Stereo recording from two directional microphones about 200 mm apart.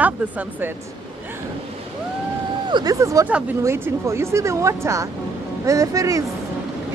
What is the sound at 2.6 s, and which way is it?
Speech, 20° right (ahead or behind).